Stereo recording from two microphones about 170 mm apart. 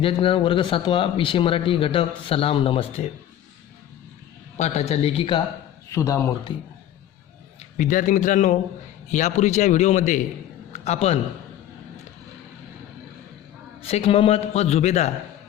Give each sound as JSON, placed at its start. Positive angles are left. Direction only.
{"t": 0.0, "sound": "speech", "side_deg": 30}
{"t": 4.5, "sound": "speech", "side_deg": 40}
{"t": 5.9, "sound": "speech", "side_deg": 20}
{"t": 7.6, "sound": "a man's voice", "side_deg": 50}
{"t": 10.7, "sound": "a sound", "side_deg": 40}
{"t": 13.8, "sound": "speech", "side_deg": 35}